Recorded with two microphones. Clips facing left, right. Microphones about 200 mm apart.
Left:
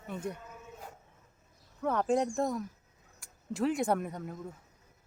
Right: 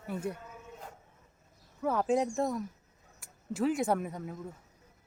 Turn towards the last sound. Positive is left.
turn(degrees=0)  # may be behind; listen again after turning